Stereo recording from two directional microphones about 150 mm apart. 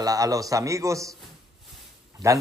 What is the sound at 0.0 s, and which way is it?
A man's voice, 25° right (ahead or behind).